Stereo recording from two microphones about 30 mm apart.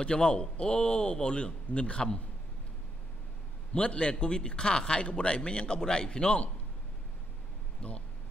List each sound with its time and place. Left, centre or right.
0.0 s a man's voice: left
3.7 s a man's voice: left
7.8 s speech: left